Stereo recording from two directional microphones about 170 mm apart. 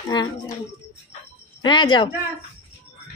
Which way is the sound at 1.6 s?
25° left (ahead or behind).